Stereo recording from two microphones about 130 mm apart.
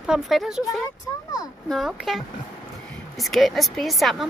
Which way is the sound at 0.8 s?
25° left (ahead or behind).